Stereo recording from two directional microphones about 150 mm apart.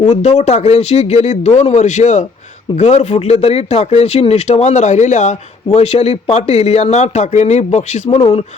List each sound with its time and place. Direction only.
0.0 s speech: 50° left (ahead or behind)